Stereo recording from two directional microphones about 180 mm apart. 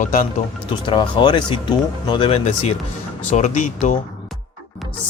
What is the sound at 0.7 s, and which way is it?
Speech, 25° left (ahead or behind).